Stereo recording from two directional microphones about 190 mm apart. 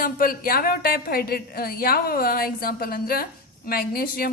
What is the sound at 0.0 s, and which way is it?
Speech, 50° left (ahead or behind).